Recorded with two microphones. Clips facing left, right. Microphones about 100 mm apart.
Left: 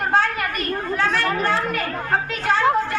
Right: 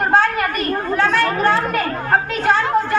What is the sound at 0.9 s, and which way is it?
Chatter, 55° right (ahead or behind).